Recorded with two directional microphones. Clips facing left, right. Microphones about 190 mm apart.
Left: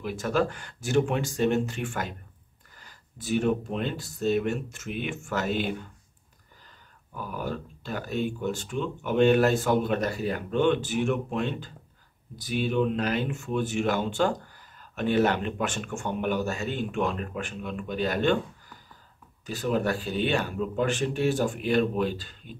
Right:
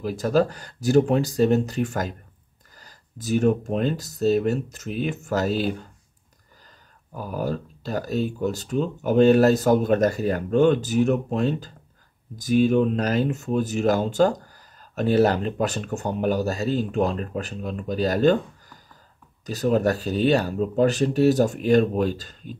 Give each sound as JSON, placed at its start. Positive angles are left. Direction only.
{"t": 0.0, "sound": "speech", "side_deg": -35}
{"t": 7.2, "sound": "speech", "side_deg": -40}
{"t": 19.4, "sound": "speech", "side_deg": -40}